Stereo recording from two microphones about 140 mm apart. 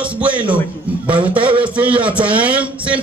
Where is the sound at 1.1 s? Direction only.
35° right (ahead or behind).